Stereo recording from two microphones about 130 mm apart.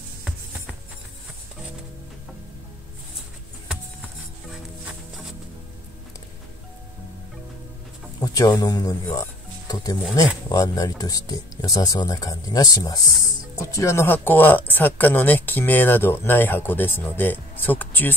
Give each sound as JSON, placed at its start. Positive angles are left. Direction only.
{"t": 8.2, "sound": "speech", "side_deg": 30}